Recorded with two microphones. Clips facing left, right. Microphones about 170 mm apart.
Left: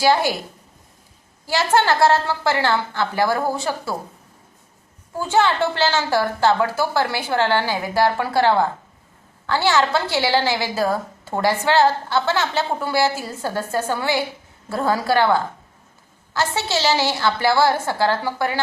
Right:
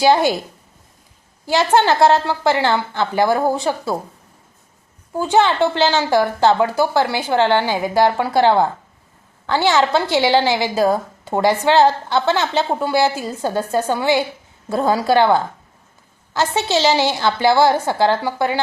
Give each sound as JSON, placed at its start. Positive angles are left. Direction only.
{"t": 0.0, "sound": "a woman's voice", "side_deg": -20}
{"t": 1.5, "sound": "a woman's voice", "side_deg": -20}
{"t": 5.1, "sound": "a woman's voice", "side_deg": -20}